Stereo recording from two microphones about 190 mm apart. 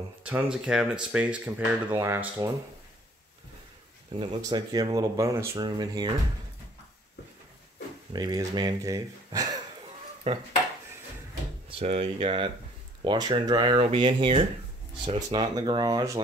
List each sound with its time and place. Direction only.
0.2 s speech: 5° right (ahead or behind)
4.1 s speech: 25° right (ahead or behind)
8.1 s speech: 20° right (ahead or behind)
10.3 s speech: 30° right (ahead or behind)
11.8 s speech: 30° right (ahead or behind)